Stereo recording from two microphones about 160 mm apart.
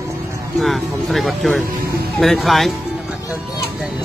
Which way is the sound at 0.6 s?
Centre (ahead or behind).